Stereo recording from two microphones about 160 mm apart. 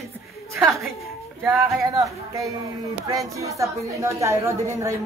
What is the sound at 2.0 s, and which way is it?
A woman's voice, 20° right (ahead or behind).